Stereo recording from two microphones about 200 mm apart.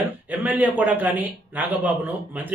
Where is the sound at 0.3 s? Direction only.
10° right (ahead or behind).